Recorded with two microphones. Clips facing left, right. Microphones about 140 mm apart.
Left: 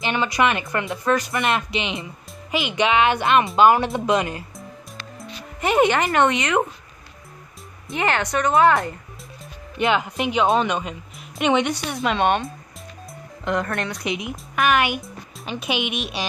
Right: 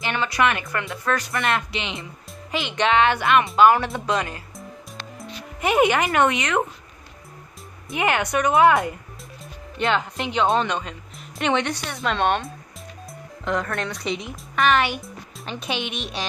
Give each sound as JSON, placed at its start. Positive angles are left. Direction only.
{"t": 0.0, "sound": "speech", "side_deg": 20}
{"t": 3.2, "sound": "speech", "side_deg": 25}
{"t": 5.2, "sound": "speech", "side_deg": -5}
{"t": 7.9, "sound": "a woman's voice", "side_deg": -10}
{"t": 9.8, "sound": "speech", "side_deg": 10}